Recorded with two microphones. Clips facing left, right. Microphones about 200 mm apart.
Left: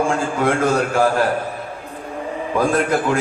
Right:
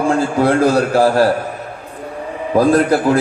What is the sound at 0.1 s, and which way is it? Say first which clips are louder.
A man's voice: right 5 dB; 35° right (ahead or behind).